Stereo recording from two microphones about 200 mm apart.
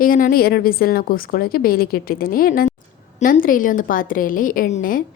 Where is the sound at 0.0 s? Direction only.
45° left (ahead or behind).